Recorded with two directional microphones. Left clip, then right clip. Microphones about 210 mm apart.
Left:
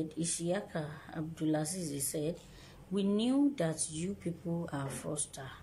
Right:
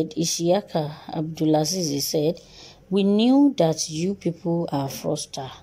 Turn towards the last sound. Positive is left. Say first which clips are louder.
# right 14 dB
turn(degrees=-30)  # may be behind; listen again after turning